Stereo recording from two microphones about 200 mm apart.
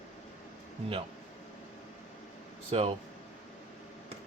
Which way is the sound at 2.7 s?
30° right (ahead or behind).